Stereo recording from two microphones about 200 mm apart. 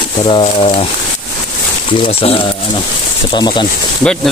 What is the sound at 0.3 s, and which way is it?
Speech, 30° left (ahead or behind).